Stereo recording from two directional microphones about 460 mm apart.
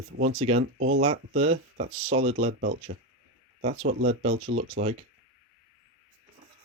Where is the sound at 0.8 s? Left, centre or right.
Right.